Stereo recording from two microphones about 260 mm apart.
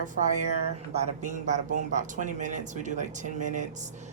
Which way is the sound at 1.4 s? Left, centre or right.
Right.